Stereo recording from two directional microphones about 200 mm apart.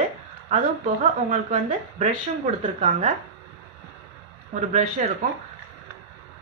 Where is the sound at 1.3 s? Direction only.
35° right (ahead or behind).